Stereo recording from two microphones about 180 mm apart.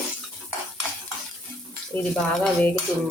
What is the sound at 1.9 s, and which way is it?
Cutlery, 5° left (ahead or behind).